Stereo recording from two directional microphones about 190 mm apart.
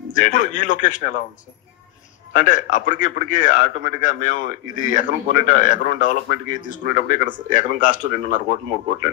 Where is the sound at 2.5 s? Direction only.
40° left (ahead or behind).